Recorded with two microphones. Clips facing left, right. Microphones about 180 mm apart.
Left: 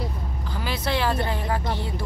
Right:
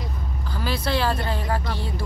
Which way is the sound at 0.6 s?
20° left (ahead or behind).